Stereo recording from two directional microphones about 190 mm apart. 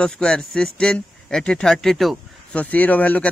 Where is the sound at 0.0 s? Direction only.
5° left (ahead or behind).